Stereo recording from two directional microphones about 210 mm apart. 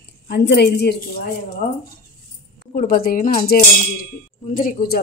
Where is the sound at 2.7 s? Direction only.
40° left (ahead or behind).